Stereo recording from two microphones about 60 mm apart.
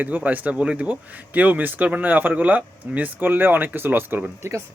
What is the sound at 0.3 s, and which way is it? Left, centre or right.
Speech, right.